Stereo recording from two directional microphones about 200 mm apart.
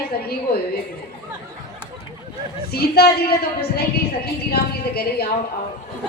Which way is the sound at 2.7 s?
50° left (ahead or behind).